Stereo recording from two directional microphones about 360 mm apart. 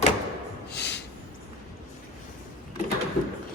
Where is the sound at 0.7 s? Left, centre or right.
Left.